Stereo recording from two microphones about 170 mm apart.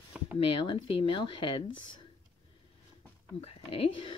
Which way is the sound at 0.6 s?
30° left (ahead or behind).